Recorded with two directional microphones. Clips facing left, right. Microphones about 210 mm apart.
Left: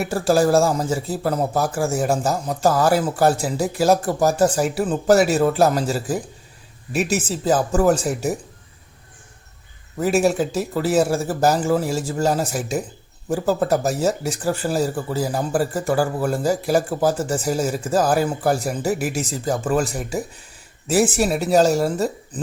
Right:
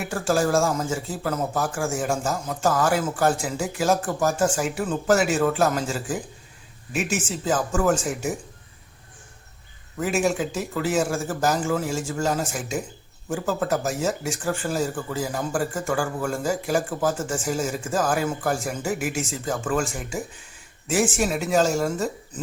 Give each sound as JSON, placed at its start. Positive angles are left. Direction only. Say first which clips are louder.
{"t": 0.1, "sound": "speech", "louder": "left 5 dB", "side_deg": 35}
{"t": 10.0, "sound": "speech", "louder": "left 5 dB", "side_deg": 35}